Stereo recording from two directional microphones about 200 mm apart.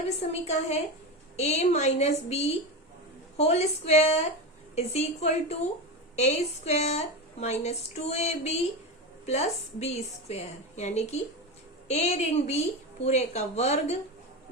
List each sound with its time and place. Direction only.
0.2 s a woman's voice: 30° left (ahead or behind)